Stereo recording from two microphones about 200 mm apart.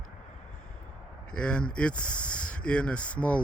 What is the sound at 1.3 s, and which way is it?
Speech, 5° left (ahead or behind).